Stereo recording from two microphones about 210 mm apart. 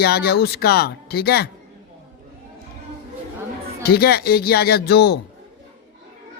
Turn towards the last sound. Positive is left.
turn(degrees=50)  # may be behind; listen again after turning